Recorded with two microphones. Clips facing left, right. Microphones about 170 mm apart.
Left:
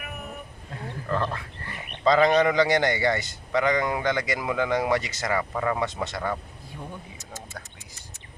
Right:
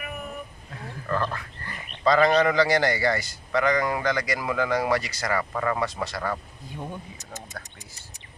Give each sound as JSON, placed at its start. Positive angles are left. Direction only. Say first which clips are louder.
{"t": 1.1, "sound": "a man's voice", "louder": "even", "side_deg": 25}
{"t": 7.6, "sound": "speech", "louder": "right 1 dB", "side_deg": 15}